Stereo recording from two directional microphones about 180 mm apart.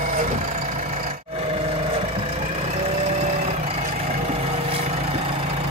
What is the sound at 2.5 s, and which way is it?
Vehicle, 35° right (ahead or behind).